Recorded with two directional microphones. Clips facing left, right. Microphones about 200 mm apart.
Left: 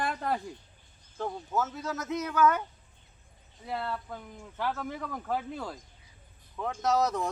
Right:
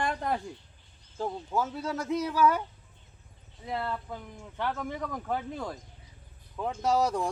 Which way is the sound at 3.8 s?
5° right (ahead or behind).